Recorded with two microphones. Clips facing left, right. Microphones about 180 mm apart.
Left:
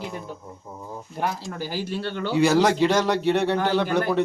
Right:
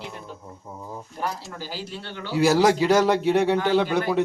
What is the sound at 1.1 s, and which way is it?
Speech, 5° left (ahead or behind).